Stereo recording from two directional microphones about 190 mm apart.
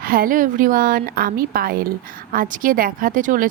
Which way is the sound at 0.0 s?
50° right (ahead or behind).